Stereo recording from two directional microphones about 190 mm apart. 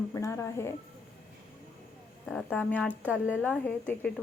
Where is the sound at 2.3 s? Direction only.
5° left (ahead or behind).